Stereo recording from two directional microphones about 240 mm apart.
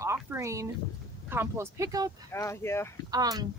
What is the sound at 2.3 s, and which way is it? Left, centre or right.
Speech, centre.